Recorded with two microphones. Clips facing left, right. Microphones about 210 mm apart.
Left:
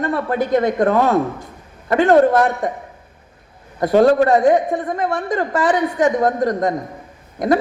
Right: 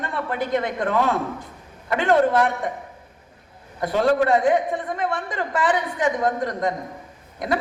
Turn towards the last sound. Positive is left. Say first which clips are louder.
# left 8 dB
turn(degrees=45)  # may be behind; listen again after turning